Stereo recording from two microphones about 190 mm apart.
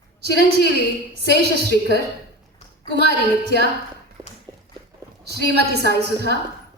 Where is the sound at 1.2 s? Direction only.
60° right (ahead or behind).